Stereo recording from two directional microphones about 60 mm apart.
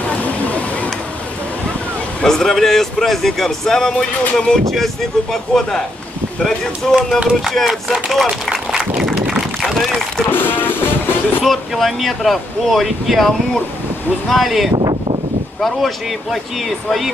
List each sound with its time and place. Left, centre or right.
0.2 s a sound: left
2.2 s a man's voice: centre
9.3 s a sound: centre
10.3 s music: left
11.4 s speech: centre
14.3 s speech: centre